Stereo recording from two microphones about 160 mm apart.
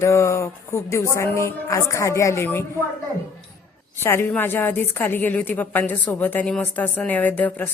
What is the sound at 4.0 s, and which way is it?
A woman's voice, 15° left (ahead or behind).